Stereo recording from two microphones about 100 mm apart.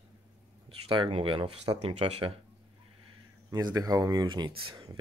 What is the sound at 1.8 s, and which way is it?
Speech, 80° right.